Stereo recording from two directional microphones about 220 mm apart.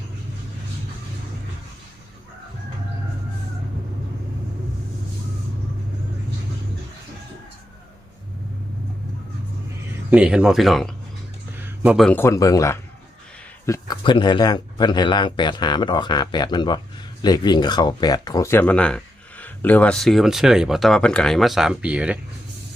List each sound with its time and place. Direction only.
10.1 s speech: 5° right (ahead or behind)
11.5 s a sound: 10° right (ahead or behind)
12.0 s speech: 10° left (ahead or behind); by 22.2 s 5° right (ahead or behind)